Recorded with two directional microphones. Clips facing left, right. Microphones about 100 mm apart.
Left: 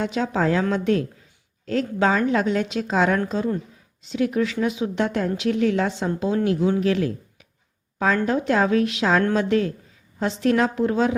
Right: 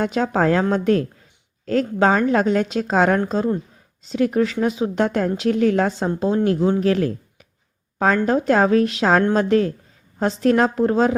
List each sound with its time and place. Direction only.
0.0 s a woman's voice: 45° right (ahead or behind)